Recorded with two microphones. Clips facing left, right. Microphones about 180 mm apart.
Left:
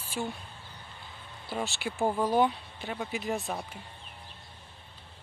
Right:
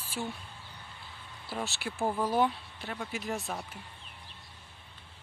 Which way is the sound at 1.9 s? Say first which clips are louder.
Left 3 dB; 25° left (ahead or behind).